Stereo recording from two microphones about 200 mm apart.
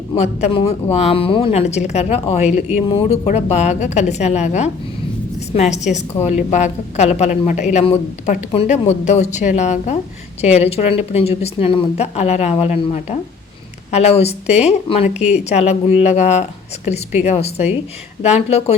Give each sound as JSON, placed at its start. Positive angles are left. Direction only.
{"t": 0.2, "sound": "speech", "side_deg": 30}